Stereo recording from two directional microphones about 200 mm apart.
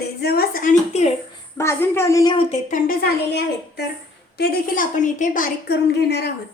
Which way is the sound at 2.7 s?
40° left (ahead or behind).